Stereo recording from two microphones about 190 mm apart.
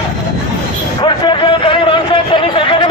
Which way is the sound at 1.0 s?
25° left (ahead or behind).